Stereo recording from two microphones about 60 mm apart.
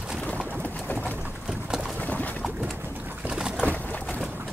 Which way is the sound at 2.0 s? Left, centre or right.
Left.